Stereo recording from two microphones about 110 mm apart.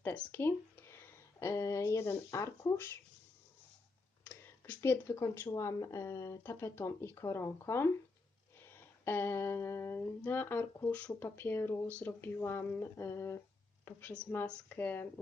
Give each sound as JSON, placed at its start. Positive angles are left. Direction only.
{"t": 0.0, "sound": "speech", "side_deg": 15}
{"t": 4.2, "sound": "a sound", "side_deg": 15}
{"t": 5.5, "sound": "speech", "side_deg": 30}
{"t": 13.8, "sound": "speech", "side_deg": 15}